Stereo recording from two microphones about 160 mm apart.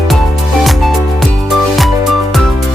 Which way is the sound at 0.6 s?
Centre (ahead or behind).